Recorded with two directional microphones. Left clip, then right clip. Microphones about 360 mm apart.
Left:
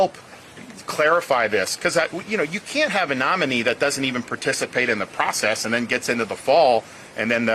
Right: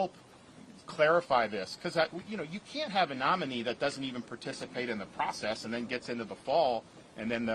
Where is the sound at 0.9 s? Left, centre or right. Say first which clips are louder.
Left 8 dB; right.